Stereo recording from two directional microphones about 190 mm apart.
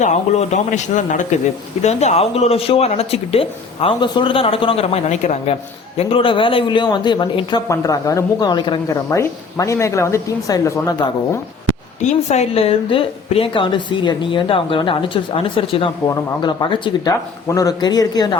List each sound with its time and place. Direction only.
0.0 s speech: 40° left (ahead or behind); by 11.1 s 15° left (ahead or behind)
12.3 s speech: 35° left (ahead or behind)